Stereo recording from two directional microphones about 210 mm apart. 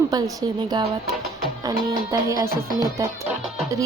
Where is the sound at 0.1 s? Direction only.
15° right (ahead or behind).